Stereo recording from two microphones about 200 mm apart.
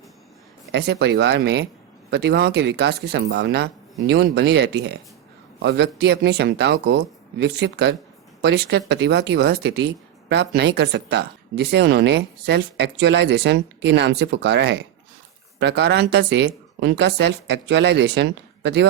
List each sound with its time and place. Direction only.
0.7 s speech: 60° right (ahead or behind)